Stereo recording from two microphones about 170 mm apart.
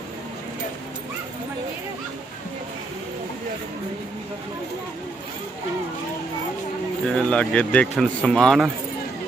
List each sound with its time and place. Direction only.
7.1 s speech: 5° left (ahead or behind)